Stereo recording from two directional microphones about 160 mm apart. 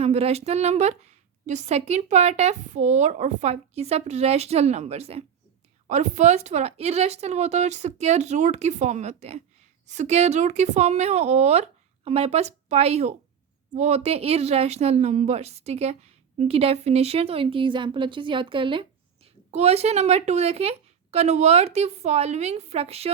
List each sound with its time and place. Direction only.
0.0 s speech: 40° right (ahead or behind)